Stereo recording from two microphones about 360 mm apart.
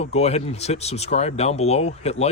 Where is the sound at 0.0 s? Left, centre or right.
Centre.